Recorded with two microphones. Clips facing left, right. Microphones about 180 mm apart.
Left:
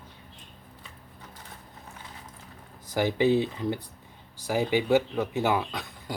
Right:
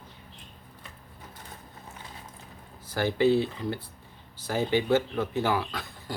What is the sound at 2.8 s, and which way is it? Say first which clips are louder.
Speech: even; 15° left (ahead or behind).